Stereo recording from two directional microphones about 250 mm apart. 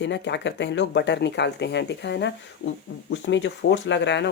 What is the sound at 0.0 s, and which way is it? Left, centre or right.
Speech, left.